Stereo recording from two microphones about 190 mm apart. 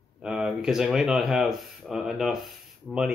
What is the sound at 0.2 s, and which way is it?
Speech, centre (ahead or behind).